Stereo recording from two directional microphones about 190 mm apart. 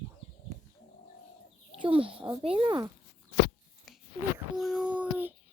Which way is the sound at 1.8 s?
30° right (ahead or behind).